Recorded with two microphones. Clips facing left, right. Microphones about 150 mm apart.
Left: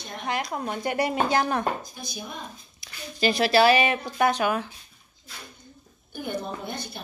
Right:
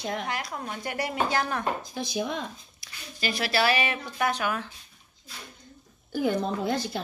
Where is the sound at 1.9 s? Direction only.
90° right.